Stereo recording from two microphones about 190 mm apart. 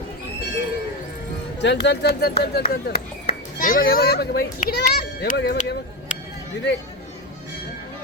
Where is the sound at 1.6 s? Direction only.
65° left (ahead or behind).